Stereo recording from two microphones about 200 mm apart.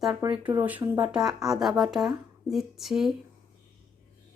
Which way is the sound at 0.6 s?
10° right (ahead or behind).